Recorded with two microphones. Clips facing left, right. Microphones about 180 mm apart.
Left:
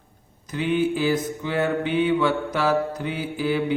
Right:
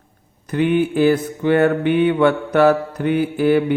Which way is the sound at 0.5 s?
60° right (ahead or behind).